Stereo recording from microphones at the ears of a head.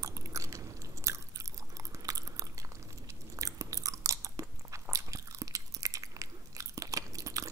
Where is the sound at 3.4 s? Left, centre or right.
Right.